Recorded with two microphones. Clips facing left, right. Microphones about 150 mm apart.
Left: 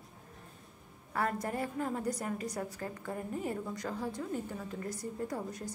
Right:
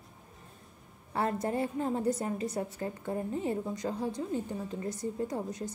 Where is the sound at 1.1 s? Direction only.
25° right (ahead or behind).